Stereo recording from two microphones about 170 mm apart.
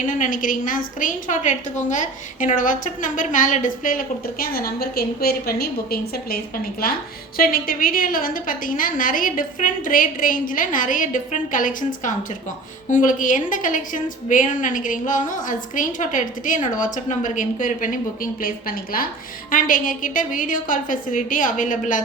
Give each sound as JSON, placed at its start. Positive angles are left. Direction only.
{"t": 0.0, "sound": "a woman's voice", "side_deg": 50}